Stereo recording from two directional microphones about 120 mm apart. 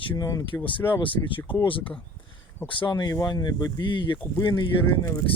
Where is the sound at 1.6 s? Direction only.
45° left (ahead or behind).